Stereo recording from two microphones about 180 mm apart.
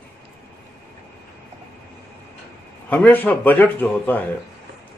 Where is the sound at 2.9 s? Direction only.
10° left (ahead or behind).